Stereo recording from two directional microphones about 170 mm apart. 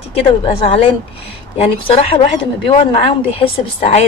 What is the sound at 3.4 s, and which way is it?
Speech, 40° left (ahead or behind).